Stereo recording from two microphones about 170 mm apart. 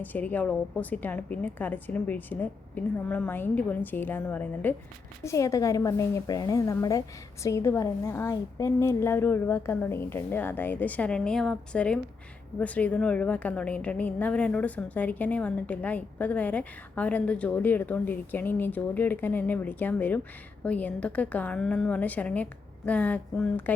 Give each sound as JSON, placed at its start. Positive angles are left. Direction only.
{"t": 0.0, "sound": "a woman's voice", "side_deg": 10}